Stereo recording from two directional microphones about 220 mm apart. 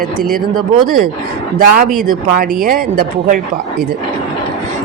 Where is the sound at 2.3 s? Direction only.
40° right (ahead or behind).